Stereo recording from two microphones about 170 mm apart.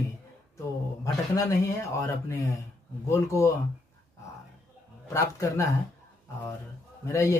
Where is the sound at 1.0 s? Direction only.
20° left (ahead or behind).